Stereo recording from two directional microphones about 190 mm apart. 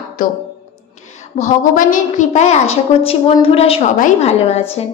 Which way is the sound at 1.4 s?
45° left (ahead or behind).